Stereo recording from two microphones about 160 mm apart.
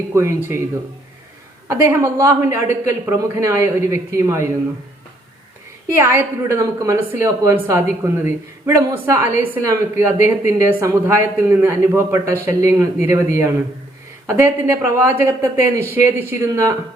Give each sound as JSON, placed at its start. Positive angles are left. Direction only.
{"t": 0.1, "sound": "a woman's voice", "side_deg": -15}
{"t": 1.6, "sound": "a woman's voice", "side_deg": -15}
{"t": 5.9, "sound": "a woman's voice", "side_deg": -15}